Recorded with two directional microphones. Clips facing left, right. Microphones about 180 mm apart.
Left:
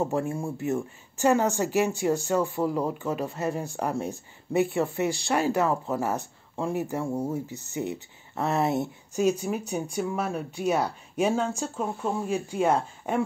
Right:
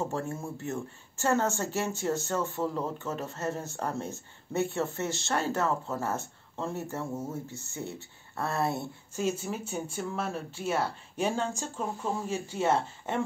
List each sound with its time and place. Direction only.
0.0 s speech: 15° left (ahead or behind)